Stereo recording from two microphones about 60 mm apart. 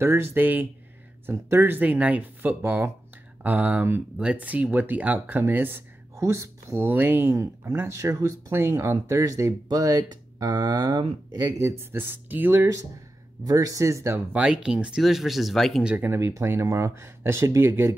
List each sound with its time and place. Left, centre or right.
0.0 s speech: right
5.5 s speech: right
6.1 s speech: right
6.9 s speech: right
7.3 s speech: right
11.6 s speech: right
13.4 s speech: right
14.3 s speech: centre
16.0 s speech: right